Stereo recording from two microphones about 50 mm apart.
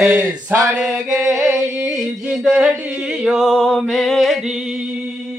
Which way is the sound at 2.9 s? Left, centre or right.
Centre.